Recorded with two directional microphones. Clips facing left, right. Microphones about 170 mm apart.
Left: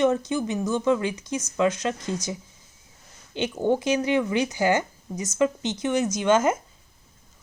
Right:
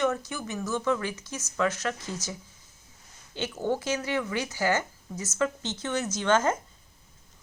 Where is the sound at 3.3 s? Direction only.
15° left (ahead or behind).